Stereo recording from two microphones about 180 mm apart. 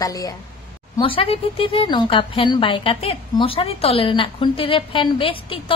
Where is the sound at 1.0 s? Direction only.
30° left (ahead or behind).